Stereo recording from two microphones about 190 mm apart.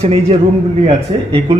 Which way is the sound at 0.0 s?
30° right (ahead or behind).